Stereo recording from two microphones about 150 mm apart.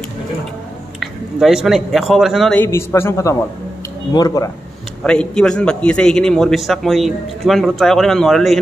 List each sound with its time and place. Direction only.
0.9 s speech: 5° right (ahead or behind)
2.6 s a man's voice: 15° left (ahead or behind)
5.0 s a man's voice: 5° left (ahead or behind)